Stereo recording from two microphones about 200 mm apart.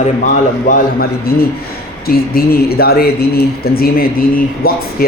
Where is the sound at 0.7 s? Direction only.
50° left (ahead or behind).